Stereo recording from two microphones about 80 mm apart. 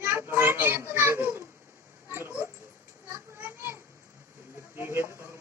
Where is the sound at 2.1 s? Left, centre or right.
Right.